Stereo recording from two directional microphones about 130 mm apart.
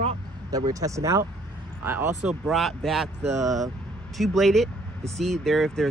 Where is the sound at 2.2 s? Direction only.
Centre (ahead or behind).